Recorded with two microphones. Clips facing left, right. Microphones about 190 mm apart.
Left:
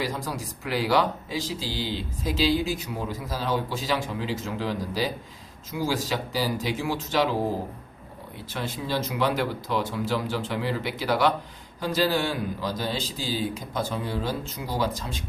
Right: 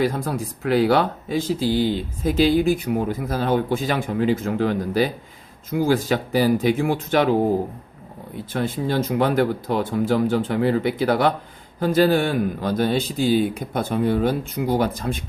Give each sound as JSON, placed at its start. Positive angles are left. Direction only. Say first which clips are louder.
{"t": 0.0, "sound": "speech", "louder": "right 8 dB", "side_deg": -55}
{"t": 8.5, "sound": "speech", "louder": "right 7 dB", "side_deg": -55}